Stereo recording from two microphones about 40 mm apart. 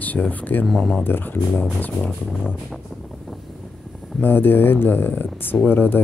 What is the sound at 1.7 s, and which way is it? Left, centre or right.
Music, left.